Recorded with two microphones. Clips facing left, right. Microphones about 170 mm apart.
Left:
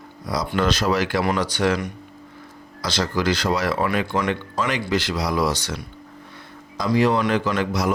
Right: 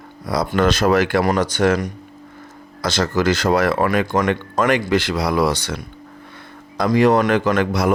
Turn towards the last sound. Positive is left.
turn(degrees=-55)  # may be behind; listen again after turning